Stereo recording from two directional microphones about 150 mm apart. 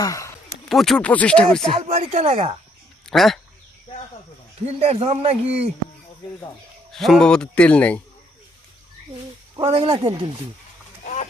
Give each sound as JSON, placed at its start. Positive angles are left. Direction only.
{"t": 0.0, "sound": "speech", "side_deg": 20}
{"t": 0.7, "sound": "speech", "side_deg": 0}
{"t": 1.7, "sound": "speech", "side_deg": -45}
{"t": 3.1, "sound": "speech", "side_deg": 0}
{"t": 4.6, "sound": "speech", "side_deg": -45}
{"t": 6.9, "sound": "speech", "side_deg": 0}
{"t": 9.6, "sound": "speech", "side_deg": -40}
{"t": 11.0, "sound": "a sound", "side_deg": 55}